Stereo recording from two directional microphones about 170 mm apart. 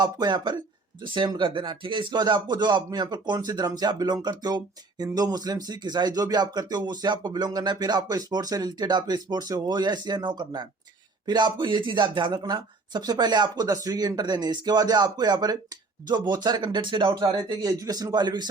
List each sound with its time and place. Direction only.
0.0 s speech: 25° right (ahead or behind)